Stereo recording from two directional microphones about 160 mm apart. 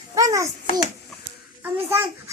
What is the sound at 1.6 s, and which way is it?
Speech, 10° right (ahead or behind).